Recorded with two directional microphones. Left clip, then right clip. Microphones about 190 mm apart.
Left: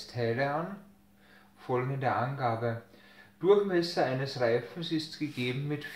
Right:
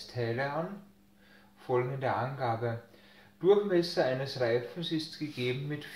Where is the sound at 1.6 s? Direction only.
30° left (ahead or behind).